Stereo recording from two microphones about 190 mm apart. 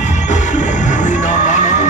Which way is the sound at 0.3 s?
40° left (ahead or behind).